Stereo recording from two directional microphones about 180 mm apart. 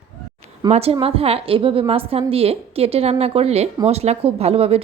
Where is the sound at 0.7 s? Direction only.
35° right (ahead or behind).